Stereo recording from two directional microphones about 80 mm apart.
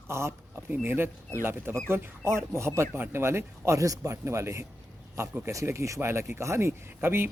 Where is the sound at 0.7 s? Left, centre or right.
Right.